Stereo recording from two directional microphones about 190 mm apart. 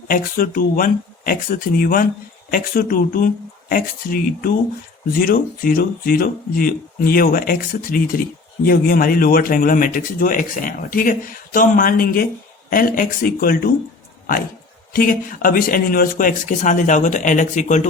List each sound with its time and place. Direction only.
0.1 s a man's voice: 50° left (ahead or behind)
14.9 s a man's voice: 50° left (ahead or behind)